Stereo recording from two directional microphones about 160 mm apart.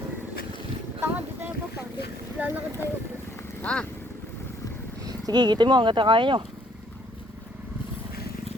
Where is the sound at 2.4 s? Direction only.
10° right (ahead or behind).